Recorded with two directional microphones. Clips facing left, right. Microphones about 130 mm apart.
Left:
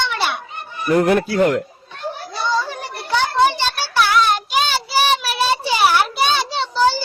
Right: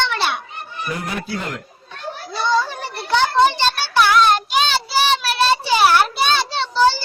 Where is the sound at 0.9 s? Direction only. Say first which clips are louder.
Left 12 dB; 55° left (ahead or behind).